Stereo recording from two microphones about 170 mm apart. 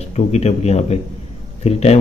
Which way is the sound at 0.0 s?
40° left (ahead or behind).